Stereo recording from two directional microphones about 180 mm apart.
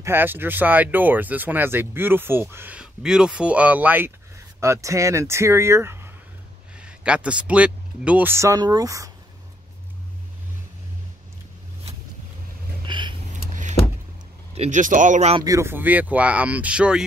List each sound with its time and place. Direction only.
0.0 s speech: 10° right (ahead or behind)
12.8 s vehicle: 25° right (ahead or behind)
14.5 s speech: 40° right (ahead or behind)
15.4 s speech: 15° right (ahead or behind)